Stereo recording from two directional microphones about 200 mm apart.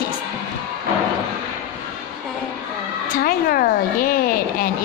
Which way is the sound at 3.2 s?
45° left (ahead or behind).